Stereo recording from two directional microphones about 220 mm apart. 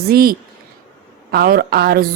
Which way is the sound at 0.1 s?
40° right (ahead or behind).